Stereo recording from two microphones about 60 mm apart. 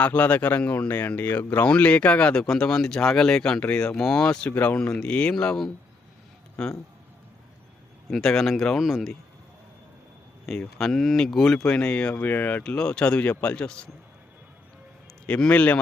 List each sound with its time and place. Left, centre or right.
0.0 s speech: left
4.4 s speech: left
8.1 s speech: centre
10.6 s speech: centre
11.6 s speech: centre
12.2 s speech: left
12.6 s speech: centre
15.4 s speech: left